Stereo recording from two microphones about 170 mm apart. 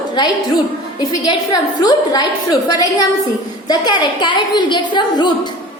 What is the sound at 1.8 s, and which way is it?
A woman's voice, 25° left (ahead or behind).